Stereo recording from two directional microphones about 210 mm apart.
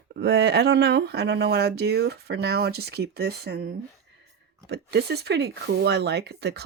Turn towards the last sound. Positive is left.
turn(degrees=-55)  # may be behind; listen again after turning